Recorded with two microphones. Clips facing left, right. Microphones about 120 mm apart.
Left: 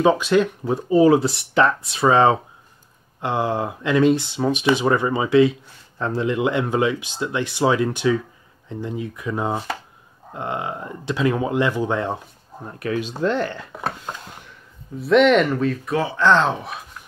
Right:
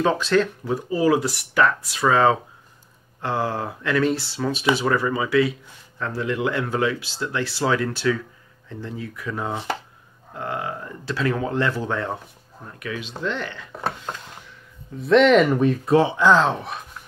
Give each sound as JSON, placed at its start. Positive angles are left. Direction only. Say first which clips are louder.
{"t": 0.0, "sound": "speech", "louder": "left 3 dB", "side_deg": 15}
{"t": 0.7, "sound": "speech", "louder": "left 5 dB", "side_deg": 25}
{"t": 12.6, "sound": "speech", "louder": "left 7 dB", "side_deg": 35}
{"t": 13.7, "sound": "speech", "louder": "even", "side_deg": 5}
{"t": 15.4, "sound": "speech", "louder": "right 2 dB", "side_deg": -15}
{"t": 15.8, "sound": "speech", "louder": "right 5 dB", "side_deg": -25}
{"t": 16.2, "sound": "speech", "louder": "even", "side_deg": -5}